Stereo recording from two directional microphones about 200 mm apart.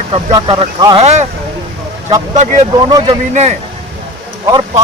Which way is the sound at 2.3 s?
40° right (ahead or behind).